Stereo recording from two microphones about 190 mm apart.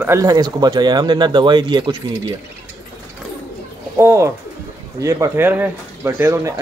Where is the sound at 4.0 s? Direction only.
15° right (ahead or behind).